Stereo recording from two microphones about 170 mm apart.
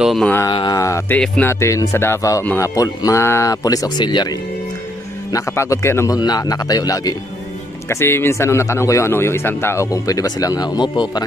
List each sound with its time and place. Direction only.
0.0 s mantra: centre (ahead or behind)
0.5 s a man's voice: 25° left (ahead or behind)